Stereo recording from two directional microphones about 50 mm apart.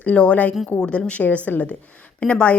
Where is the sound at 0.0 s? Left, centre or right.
Left.